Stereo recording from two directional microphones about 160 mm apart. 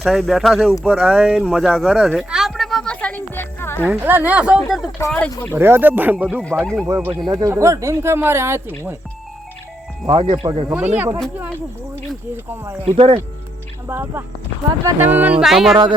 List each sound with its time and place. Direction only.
0.0 s speech: centre (ahead or behind)
0.9 s a sound: 5° right (ahead or behind); by 3.8 s 15° left (ahead or behind)
3.8 s speech: 10° right (ahead or behind)
4.9 s speech: 15° left (ahead or behind)
5.5 s speech: 15° right (ahead or behind)
10.1 s speech: 30° right (ahead or behind)
10.9 s speech: 10° right (ahead or behind)
12.8 s speech: 35° right (ahead or behind)
13.8 s speech: 15° right (ahead or behind)